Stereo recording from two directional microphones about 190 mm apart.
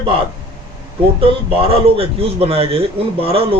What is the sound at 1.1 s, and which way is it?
A man's voice, 30° right (ahead or behind).